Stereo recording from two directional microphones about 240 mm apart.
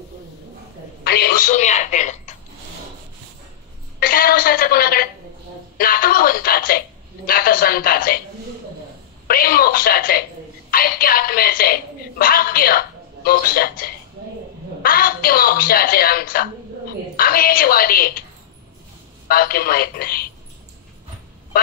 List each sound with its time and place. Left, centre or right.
1.0 s a woman's voice: left
4.0 s a woman's voice: left
9.3 s a woman's voice: left
19.2 s a woman's voice: left